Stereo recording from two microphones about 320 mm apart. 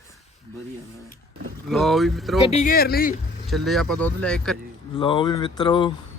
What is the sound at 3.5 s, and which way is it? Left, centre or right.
Speech, centre.